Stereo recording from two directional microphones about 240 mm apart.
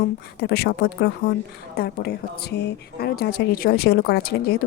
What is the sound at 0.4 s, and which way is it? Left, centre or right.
A woman's voice, left.